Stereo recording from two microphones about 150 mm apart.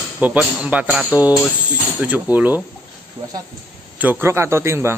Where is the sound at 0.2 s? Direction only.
10° right (ahead or behind).